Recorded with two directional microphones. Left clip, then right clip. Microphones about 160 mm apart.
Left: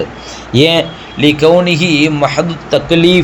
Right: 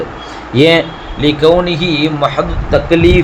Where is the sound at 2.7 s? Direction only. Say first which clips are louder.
Even; 35° left (ahead or behind).